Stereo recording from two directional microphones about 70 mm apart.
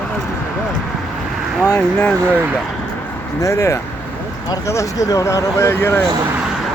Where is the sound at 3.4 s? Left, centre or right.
Left.